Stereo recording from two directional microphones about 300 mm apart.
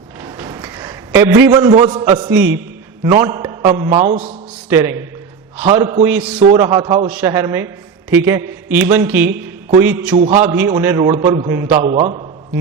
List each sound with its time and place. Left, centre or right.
0.2 s a sound: centre
3.8 s a man's voice: centre
4.7 s a man's voice: centre
6.4 s a man's voice: centre
10.2 s a man's voice: right
10.4 s a man's voice: centre